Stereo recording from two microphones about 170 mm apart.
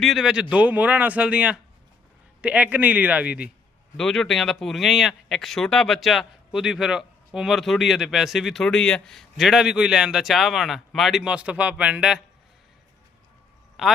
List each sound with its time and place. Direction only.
0.0 s a man's voice: centre (ahead or behind)
3.9 s speech: 5° left (ahead or behind)
13.8 s speech: centre (ahead or behind)